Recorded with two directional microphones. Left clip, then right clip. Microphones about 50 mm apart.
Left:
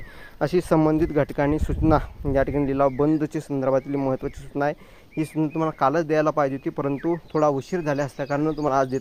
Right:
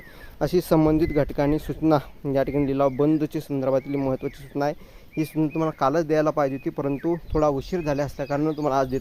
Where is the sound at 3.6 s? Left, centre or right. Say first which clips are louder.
Left 1 dB; left.